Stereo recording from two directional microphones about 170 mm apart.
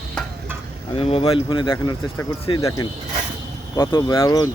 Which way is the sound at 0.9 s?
35° left (ahead or behind).